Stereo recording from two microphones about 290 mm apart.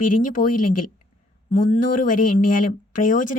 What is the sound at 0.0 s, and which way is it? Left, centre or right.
Speech, left.